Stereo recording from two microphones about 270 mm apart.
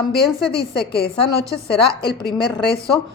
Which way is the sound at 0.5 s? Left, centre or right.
Left.